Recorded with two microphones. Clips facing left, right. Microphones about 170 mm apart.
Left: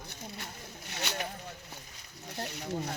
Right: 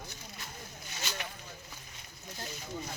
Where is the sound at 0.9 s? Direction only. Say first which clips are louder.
Left 4 dB; 65° left (ahead or behind).